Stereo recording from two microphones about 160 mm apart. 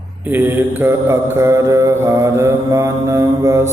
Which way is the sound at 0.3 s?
10° right (ahead or behind).